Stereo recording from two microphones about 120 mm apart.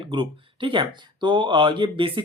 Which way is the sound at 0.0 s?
40° right (ahead or behind).